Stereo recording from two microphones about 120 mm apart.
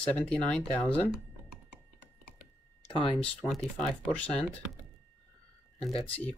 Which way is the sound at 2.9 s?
45° left (ahead or behind).